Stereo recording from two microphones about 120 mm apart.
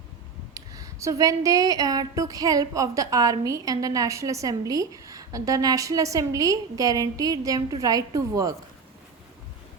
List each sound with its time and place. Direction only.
0.5 s a woman's voice: 30° right (ahead or behind)